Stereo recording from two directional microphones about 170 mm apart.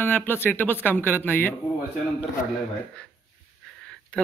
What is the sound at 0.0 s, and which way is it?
Speech, 10° left (ahead or behind).